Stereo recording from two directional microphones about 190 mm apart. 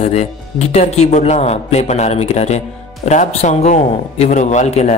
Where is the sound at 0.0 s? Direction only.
35° left (ahead or behind).